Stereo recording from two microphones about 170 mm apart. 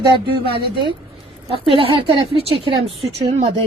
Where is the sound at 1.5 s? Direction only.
30° right (ahead or behind).